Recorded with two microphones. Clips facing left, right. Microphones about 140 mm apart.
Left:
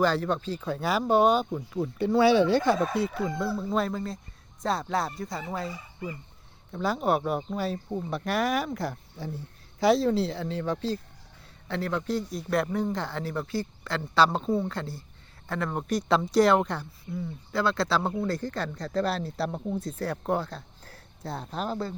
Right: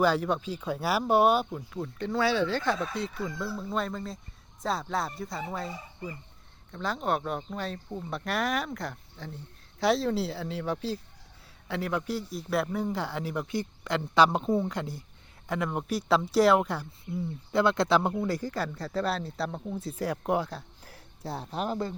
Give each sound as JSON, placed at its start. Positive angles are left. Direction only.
{"t": 0.0, "sound": "speech", "side_deg": -10}
{"t": 1.7, "sound": "speech", "side_deg": 10}
{"t": 6.7, "sound": "speech", "side_deg": 10}
{"t": 8.1, "sound": "speech", "side_deg": 0}
{"t": 17.5, "sound": "speech", "side_deg": -20}
{"t": 19.8, "sound": "speech", "side_deg": -10}